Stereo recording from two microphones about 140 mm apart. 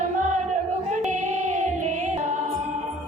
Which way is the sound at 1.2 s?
55° right (ahead or behind).